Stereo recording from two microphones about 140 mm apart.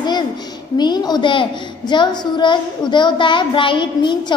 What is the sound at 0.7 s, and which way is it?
A child's voice, 30° left (ahead or behind).